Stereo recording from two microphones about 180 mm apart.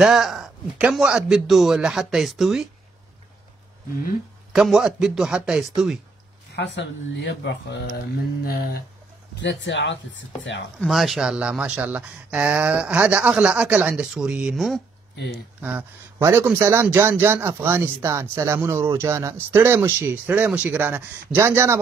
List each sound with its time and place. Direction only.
0.0 s speech: centre (ahead or behind)
4.5 s speech: 5° right (ahead or behind)
6.5 s speech: 65° left (ahead or behind)
8.5 s speech: 55° left (ahead or behind)
9.3 s speech: 80° left
10.8 s speech: centre (ahead or behind)